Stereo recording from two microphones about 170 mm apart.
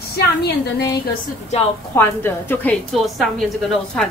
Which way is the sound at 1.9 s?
10° left (ahead or behind).